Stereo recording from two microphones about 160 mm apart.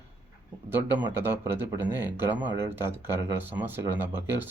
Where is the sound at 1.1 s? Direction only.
15° right (ahead or behind).